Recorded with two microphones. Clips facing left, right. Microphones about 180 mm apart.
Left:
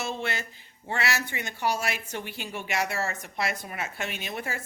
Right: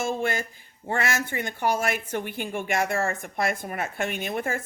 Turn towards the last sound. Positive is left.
turn(degrees=-50)  # may be behind; listen again after turning